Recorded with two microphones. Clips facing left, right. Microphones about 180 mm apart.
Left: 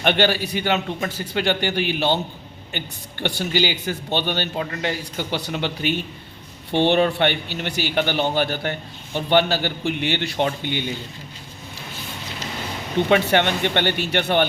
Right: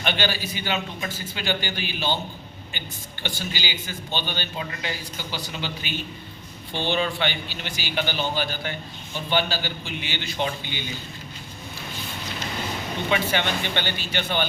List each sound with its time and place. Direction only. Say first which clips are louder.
0.0 s a man's voice: left 7 dB; 60° left (ahead or behind)
13.1 s a man's voice: left 6 dB; 65° left (ahead or behind)